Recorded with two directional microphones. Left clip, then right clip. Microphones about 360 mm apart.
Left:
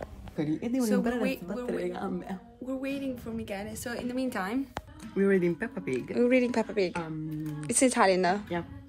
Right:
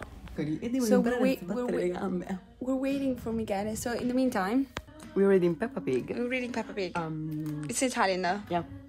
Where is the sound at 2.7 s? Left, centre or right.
Centre.